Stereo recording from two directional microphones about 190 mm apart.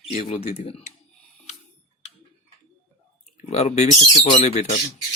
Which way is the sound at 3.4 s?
35° left (ahead or behind).